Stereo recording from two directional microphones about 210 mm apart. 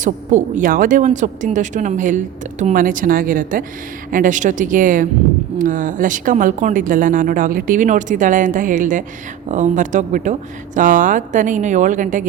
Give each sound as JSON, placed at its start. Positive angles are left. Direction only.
{"t": 0.0, "sound": "speech", "side_deg": -35}